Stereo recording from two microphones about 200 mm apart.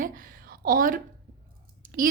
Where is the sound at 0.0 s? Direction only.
45° right (ahead or behind).